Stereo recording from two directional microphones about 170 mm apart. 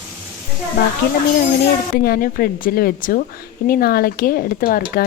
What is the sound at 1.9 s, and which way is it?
Speech, 60° left (ahead or behind).